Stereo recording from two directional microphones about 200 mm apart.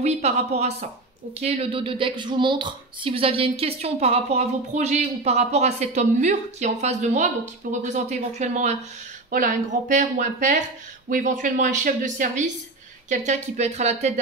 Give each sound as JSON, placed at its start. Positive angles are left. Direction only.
{"t": 0.0, "sound": "speech", "side_deg": -35}